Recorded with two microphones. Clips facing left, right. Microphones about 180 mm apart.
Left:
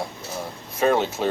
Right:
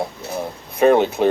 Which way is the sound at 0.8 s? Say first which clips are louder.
Right 6 dB; 60° right (ahead or behind).